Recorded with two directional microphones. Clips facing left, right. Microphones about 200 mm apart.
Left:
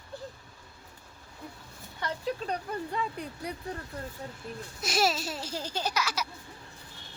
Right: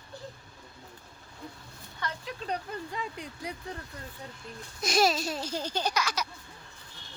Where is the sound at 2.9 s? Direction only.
55° left (ahead or behind).